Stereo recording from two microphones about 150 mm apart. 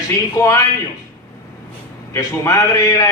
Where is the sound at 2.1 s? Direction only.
20° left (ahead or behind).